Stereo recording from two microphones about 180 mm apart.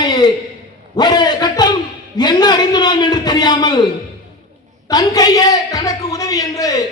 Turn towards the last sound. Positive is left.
turn(degrees=20)  # may be behind; listen again after turning